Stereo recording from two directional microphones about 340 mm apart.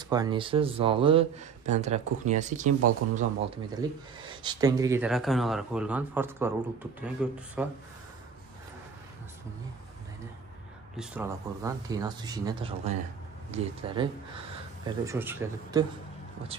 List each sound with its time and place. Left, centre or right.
0.1 s speech: centre
11.0 s speech: centre
14.9 s speech: centre